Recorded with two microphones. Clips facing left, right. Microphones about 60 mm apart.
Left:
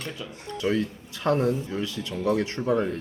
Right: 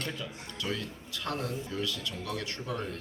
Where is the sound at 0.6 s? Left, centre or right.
Left.